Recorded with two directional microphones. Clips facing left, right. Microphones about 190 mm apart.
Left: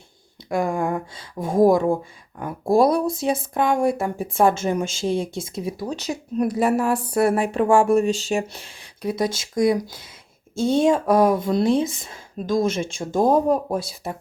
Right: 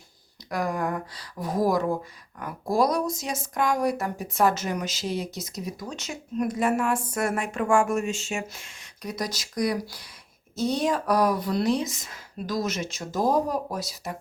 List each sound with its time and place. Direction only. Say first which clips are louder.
0.5 s speech: left 5 dB; 25° left (ahead or behind)